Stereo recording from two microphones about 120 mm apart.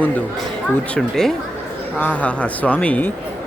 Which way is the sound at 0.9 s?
5° left (ahead or behind).